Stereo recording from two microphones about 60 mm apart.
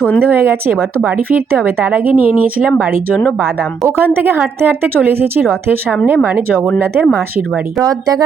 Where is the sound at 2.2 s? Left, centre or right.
Right.